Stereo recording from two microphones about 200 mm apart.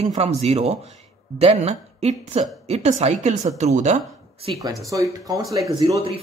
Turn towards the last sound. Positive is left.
turn(degrees=-25)  # may be behind; listen again after turning